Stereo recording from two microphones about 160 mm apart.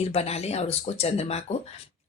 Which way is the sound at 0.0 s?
40° left (ahead or behind).